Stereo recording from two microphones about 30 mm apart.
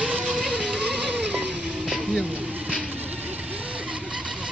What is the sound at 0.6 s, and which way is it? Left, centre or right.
Vehicle, right.